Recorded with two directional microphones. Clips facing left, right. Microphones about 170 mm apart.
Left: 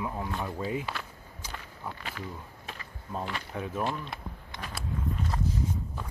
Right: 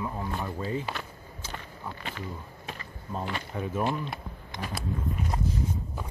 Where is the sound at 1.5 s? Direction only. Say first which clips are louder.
Even; centre (ahead or behind).